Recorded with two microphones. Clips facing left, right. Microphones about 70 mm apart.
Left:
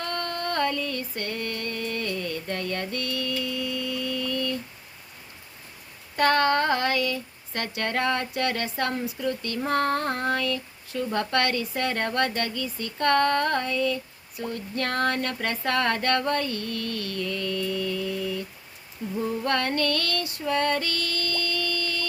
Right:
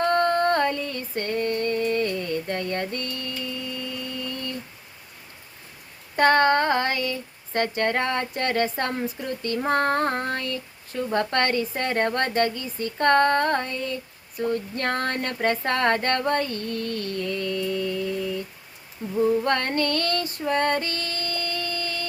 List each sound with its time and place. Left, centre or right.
0.0 s female singing: right
6.1 s speech: right
19.0 s speech: right
19.5 s female singing: right